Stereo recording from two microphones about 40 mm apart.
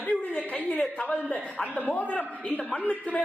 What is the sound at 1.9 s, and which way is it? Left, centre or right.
Speech, left.